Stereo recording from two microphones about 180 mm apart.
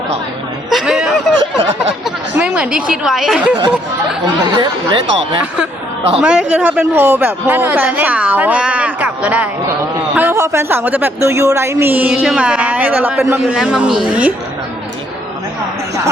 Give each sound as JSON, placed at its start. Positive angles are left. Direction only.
{"t": 0.7, "sound": "chatter", "side_deg": 0}
{"t": 2.4, "sound": "a woman's voice", "side_deg": -5}
{"t": 4.5, "sound": "speech", "side_deg": -25}
{"t": 6.1, "sound": "a woman's voice", "side_deg": -5}